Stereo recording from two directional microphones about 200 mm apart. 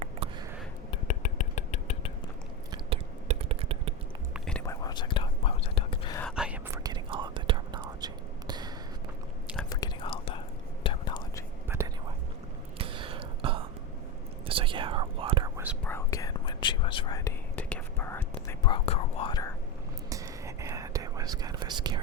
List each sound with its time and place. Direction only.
0.2 s a sound: 25° right (ahead or behind)
0.9 s a sound: 35° left (ahead or behind)
2.7 s whispering: 30° right (ahead or behind)
4.4 s whispering: 5° left (ahead or behind)
4.6 s whispering: 15° left (ahead or behind)
6.3 s whispering: 5° right (ahead or behind)
6.8 s whispering: 20° right (ahead or behind)
9.6 s whispering: 20° left (ahead or behind)
12.8 s whispering: 25° right (ahead or behind)
15.5 s whispering: 5° right (ahead or behind)
15.8 s whispering: 10° left (ahead or behind)
20.1 s whispering: 15° right (ahead or behind)